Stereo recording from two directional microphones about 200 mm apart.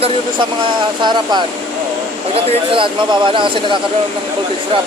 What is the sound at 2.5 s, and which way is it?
Speech, 25° right (ahead or behind).